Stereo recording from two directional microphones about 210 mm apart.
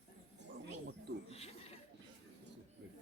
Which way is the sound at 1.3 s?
30° left (ahead or behind).